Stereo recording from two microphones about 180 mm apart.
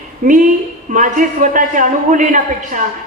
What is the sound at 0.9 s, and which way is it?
A man's voice, 45° right (ahead or behind).